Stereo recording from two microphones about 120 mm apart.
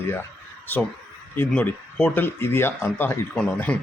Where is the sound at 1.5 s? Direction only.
10° left (ahead or behind).